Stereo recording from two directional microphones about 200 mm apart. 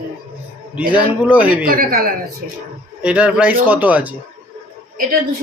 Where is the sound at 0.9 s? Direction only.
5° right (ahead or behind).